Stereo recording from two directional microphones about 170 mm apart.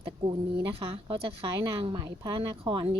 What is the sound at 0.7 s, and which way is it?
A woman's voice, 35° right (ahead or behind).